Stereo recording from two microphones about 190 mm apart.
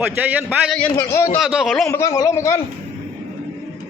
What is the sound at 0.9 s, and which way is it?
Speech, 15° left (ahead or behind).